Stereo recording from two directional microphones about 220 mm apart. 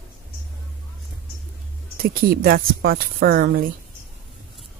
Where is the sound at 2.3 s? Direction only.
45° right (ahead or behind).